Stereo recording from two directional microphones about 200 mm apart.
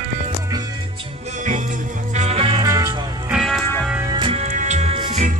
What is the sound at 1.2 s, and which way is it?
Music, 35° right (ahead or behind).